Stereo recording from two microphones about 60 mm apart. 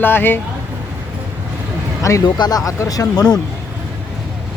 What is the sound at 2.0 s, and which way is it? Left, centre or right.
Speech, left.